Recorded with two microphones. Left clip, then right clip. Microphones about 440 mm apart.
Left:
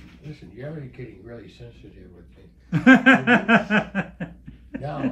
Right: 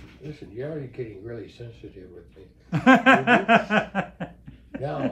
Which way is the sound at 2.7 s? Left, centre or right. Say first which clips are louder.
Left 1 dB; centre.